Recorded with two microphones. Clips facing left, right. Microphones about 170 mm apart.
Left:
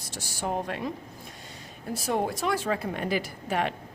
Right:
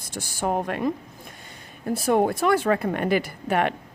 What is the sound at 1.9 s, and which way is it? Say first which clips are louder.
Speech: right 7 dB; 55° right (ahead or behind).